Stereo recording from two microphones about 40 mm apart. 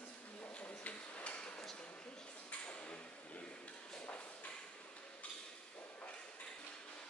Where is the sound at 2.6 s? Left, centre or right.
Left.